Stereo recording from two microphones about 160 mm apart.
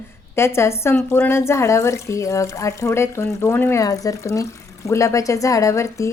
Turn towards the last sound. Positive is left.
turn(degrees=20)  # may be behind; listen again after turning